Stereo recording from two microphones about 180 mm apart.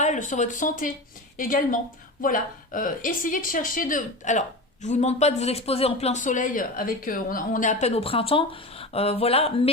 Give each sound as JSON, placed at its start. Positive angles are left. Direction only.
{"t": 0.0, "sound": "a woman's voice", "side_deg": 45}